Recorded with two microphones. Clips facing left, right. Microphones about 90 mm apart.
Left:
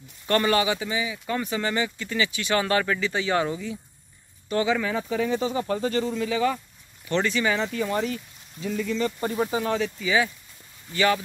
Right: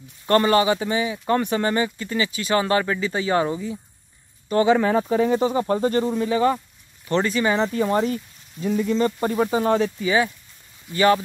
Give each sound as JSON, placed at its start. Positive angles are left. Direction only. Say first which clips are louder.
{"t": 0.3, "sound": "speech", "louder": "right 5 dB", "side_deg": -35}
{"t": 1.7, "sound": "speech", "louder": "right 4 dB", "side_deg": -35}
{"t": 4.6, "sound": "speech", "louder": "right 7 dB", "side_deg": -45}